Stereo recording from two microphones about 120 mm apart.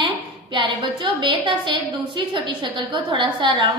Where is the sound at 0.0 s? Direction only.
45° right (ahead or behind).